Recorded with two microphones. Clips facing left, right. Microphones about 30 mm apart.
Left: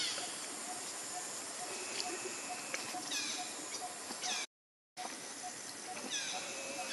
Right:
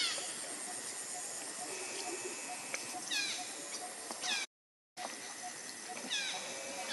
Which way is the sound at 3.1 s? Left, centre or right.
Right.